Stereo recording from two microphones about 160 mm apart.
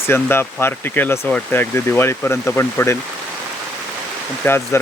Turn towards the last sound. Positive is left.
turn(degrees=15)  # may be behind; listen again after turning